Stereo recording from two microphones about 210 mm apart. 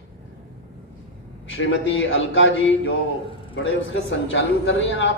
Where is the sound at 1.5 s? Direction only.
65° left (ahead or behind).